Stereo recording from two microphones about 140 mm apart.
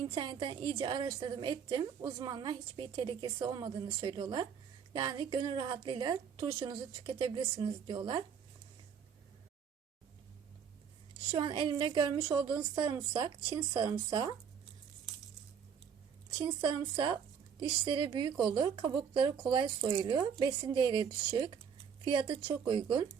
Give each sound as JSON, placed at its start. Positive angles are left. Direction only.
{"t": 0.1, "sound": "a woman's voice", "side_deg": -35}
{"t": 11.3, "sound": "a woman's voice", "side_deg": -35}
{"t": 16.3, "sound": "a woman's voice", "side_deg": -30}